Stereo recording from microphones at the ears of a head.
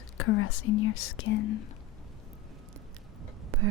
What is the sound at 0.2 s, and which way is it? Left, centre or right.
Speech, left.